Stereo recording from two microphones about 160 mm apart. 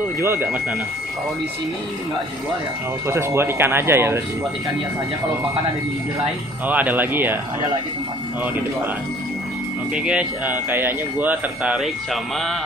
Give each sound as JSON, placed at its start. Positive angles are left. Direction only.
{"t": 0.2, "sound": "speech", "side_deg": -15}
{"t": 3.1, "sound": "speech", "side_deg": -15}
{"t": 6.7, "sound": "speech", "side_deg": -10}
{"t": 9.9, "sound": "speech", "side_deg": -5}